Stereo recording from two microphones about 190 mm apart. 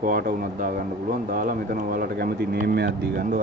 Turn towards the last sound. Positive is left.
turn(degrees=-50)  # may be behind; listen again after turning